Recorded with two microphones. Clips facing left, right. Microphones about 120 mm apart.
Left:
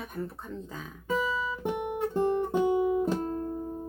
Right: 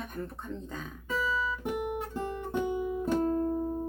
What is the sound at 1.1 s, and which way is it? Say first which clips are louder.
Guitar: left 2 dB; 20° left (ahead or behind).